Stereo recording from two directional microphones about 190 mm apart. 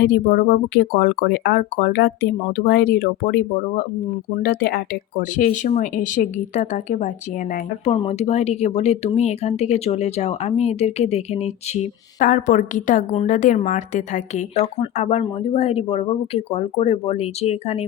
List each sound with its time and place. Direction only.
0.0 s speech: 55° left (ahead or behind)
5.6 s speech: 40° left (ahead or behind)
7.9 s speech: 30° left (ahead or behind)